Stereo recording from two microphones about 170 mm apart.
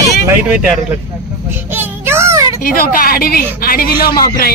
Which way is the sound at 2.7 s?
60° left (ahead or behind).